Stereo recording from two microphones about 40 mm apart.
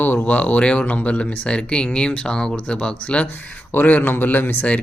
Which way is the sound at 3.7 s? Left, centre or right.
Left.